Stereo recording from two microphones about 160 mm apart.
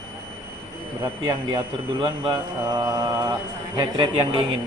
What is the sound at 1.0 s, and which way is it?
A man's voice, 30° right (ahead or behind).